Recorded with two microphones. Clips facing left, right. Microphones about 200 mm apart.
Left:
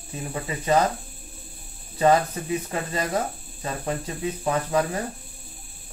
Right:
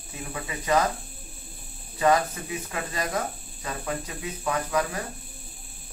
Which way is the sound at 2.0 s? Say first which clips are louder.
Left 3 dB; 30° left (ahead or behind).